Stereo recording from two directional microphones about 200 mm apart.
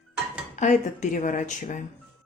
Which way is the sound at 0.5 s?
35° left (ahead or behind).